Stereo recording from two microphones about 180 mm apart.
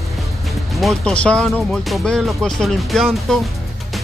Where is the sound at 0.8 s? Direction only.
Centre (ahead or behind).